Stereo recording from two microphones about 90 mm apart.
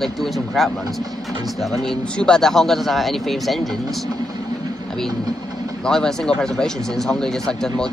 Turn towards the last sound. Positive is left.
turn(degrees=5)  # may be behind; listen again after turning